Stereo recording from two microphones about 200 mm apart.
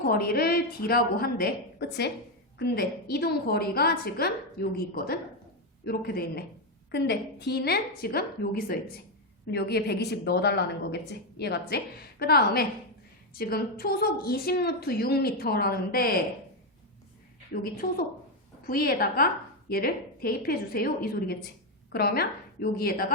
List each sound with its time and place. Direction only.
0.0 s a woman's voice: 50° left (ahead or behind)
17.5 s a woman's voice: 45° left (ahead or behind)